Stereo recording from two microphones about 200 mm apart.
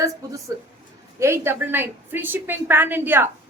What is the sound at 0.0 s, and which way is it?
A woman's voice, 15° right (ahead or behind).